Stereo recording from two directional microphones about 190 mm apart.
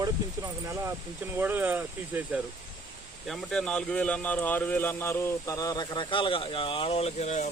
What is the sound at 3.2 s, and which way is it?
Speech, centre (ahead or behind).